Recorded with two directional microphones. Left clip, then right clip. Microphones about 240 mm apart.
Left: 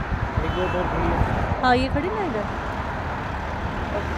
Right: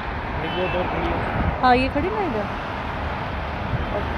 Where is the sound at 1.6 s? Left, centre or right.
Centre.